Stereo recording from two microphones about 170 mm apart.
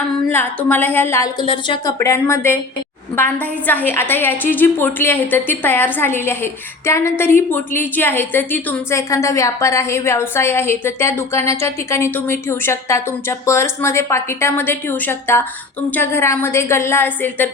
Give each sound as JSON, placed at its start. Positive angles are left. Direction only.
{"t": 0.3, "sound": "a woman's voice", "side_deg": 10}
{"t": 1.4, "sound": "a woman's voice", "side_deg": 25}